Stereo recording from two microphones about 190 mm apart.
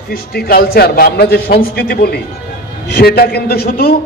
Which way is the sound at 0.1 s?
55° left (ahead or behind).